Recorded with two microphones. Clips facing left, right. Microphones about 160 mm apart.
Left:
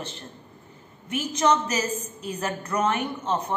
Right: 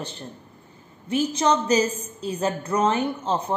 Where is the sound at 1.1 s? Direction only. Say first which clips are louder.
Right 2 dB; 30° right (ahead or behind).